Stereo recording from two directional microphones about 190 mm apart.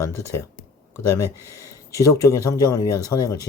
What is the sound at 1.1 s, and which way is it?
Speech, 15° left (ahead or behind).